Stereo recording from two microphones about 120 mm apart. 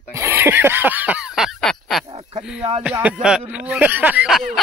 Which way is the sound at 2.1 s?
60° right (ahead or behind).